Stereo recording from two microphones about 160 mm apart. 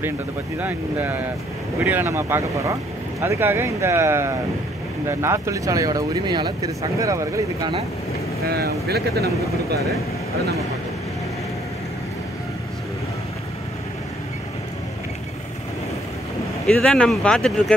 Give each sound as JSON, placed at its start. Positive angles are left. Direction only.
{"t": 0.6, "sound": "speech", "side_deg": -10}
{"t": 8.5, "sound": "speech", "side_deg": -80}
{"t": 16.6, "sound": "speech", "side_deg": 5}